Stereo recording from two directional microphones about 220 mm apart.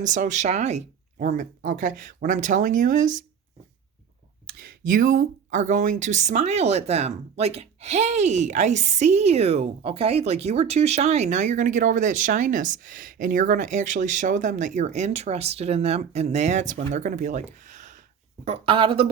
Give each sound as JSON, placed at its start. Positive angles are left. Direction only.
{"t": 0.0, "sound": "speech", "side_deg": -35}
{"t": 4.9, "sound": "a woman's voice", "side_deg": -35}